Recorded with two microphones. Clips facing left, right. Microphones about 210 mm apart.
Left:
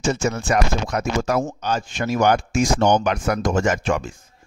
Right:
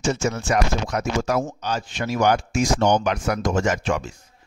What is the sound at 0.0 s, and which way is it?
A man's voice, 55° left (ahead or behind).